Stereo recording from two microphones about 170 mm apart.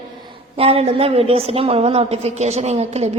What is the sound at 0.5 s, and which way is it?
A woman's voice, 35° right (ahead or behind).